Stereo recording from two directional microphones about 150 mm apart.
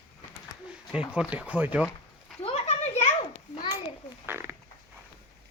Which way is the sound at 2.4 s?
45° left (ahead or behind).